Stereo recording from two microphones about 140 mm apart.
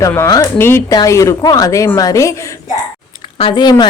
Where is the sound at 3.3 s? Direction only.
35° left (ahead or behind).